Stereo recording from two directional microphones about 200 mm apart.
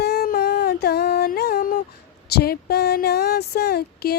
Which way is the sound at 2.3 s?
50° left (ahead or behind).